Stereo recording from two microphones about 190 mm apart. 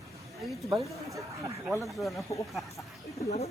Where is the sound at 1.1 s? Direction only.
15° right (ahead or behind).